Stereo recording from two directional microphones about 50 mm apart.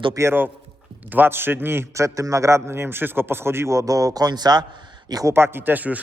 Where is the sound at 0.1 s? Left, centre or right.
Right.